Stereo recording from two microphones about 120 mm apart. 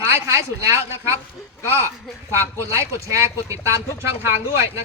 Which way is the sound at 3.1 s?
25° right (ahead or behind).